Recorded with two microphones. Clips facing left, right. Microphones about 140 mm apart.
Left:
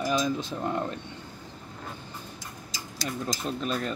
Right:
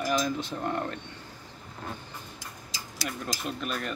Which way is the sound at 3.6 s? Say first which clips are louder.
Left 4 dB; 30° left (ahead or behind).